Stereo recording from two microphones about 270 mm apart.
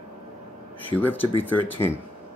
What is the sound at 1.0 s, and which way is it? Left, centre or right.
Speech, centre.